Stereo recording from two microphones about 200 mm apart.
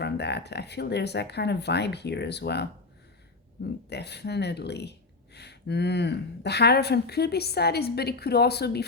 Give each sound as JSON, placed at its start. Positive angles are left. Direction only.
{"t": 0.0, "sound": "speech", "side_deg": 55}
{"t": 3.8, "sound": "speech", "side_deg": 55}